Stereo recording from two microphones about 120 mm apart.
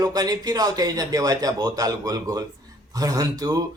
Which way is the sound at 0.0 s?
35° right (ahead or behind).